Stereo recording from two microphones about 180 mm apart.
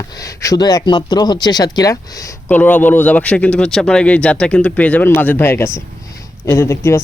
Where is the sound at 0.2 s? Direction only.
20° left (ahead or behind).